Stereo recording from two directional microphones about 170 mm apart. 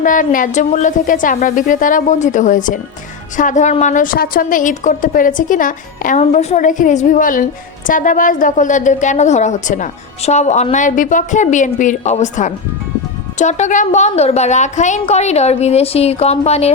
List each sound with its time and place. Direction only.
0.0 s a woman's voice: 50° left (ahead or behind)